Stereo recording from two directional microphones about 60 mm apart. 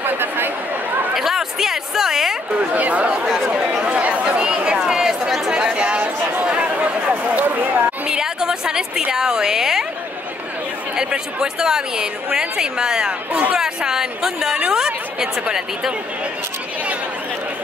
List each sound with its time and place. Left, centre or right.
0.0 s chatter: right
1.1 s a sound: centre
2.5 s speech: right
3.8 s chatter: right; by 5.5 s centre
5.5 s chatter: centre
6.4 s a sound: right
8.1 s a woman's voice: centre
11.0 s a woman's voice: centre